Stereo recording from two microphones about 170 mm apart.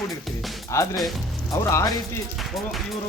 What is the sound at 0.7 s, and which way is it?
Music, 15° left (ahead or behind).